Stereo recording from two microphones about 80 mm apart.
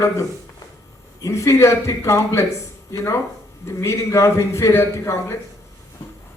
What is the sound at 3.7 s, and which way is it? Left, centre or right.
A man's voice, left.